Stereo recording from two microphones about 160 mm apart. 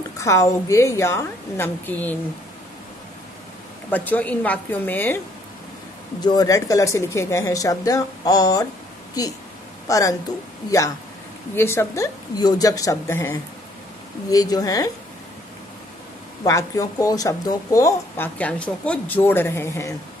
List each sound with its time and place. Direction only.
0.2 s speech: 20° left (ahead or behind)
3.9 s speech: 10° left (ahead or behind)
6.2 s speech: 25° left (ahead or behind)
9.8 s speech: 20° left (ahead or behind)
11.5 s speech: 15° left (ahead or behind)
16.4 s speech: 20° left (ahead or behind)